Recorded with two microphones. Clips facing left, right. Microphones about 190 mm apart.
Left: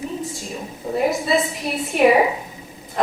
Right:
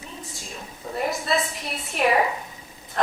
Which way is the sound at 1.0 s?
Centre (ahead or behind).